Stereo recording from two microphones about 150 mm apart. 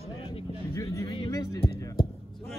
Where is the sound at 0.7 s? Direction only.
20° left (ahead or behind).